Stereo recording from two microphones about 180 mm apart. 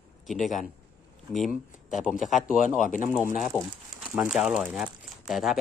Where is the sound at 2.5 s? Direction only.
45° left (ahead or behind).